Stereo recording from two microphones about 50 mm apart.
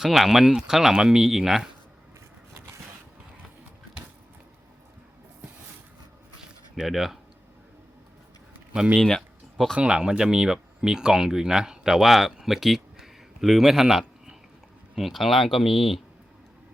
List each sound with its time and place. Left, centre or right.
0.0 s speech: centre
6.4 s a sound: centre
8.7 s speech: centre
9.0 s speech: centre
9.7 s speech: right; by 16.0 s centre